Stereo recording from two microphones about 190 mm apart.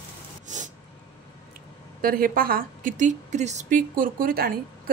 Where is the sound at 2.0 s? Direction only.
50° right (ahead or behind).